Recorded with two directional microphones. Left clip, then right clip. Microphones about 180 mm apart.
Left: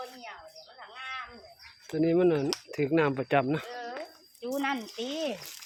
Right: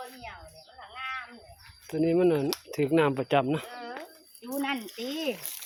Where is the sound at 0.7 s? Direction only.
10° left (ahead or behind).